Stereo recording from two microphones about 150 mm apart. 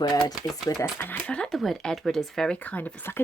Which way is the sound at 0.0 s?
25° left (ahead or behind).